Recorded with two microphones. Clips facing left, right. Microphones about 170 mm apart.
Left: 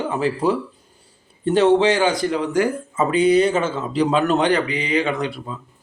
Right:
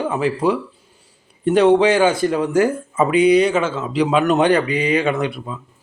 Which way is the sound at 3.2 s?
15° right (ahead or behind).